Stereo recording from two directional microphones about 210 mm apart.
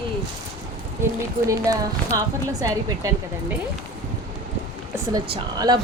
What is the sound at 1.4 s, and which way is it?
Speech, 15° right (ahead or behind).